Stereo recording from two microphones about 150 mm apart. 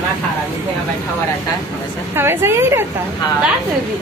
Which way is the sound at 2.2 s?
15° right (ahead or behind).